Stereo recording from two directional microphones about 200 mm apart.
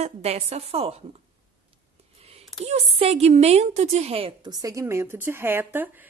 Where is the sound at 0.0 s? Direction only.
30° right (ahead or behind).